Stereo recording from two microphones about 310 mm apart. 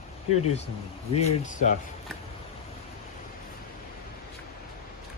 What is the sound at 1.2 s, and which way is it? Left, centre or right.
Speech, left.